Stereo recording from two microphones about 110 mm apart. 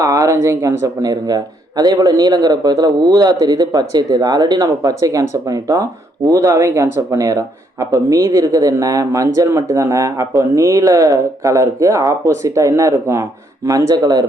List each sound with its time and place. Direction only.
0.0 s speech: 30° right (ahead or behind)
13.9 s speech: 40° right (ahead or behind)